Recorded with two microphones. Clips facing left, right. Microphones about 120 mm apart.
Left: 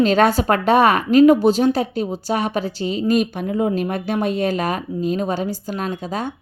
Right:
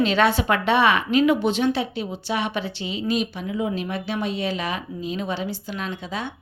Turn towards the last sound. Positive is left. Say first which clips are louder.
# left 5 dB
turn(degrees=45)  # may be behind; listen again after turning